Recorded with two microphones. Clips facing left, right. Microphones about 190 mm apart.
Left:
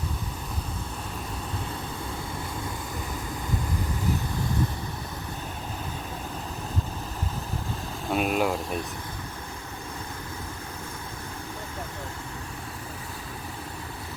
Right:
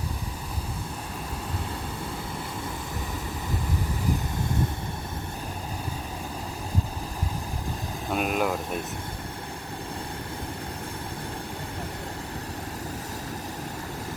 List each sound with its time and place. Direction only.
8.1 s speech: centre (ahead or behind)